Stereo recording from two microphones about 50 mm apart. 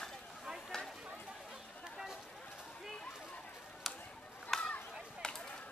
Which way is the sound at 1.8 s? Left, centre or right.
Centre.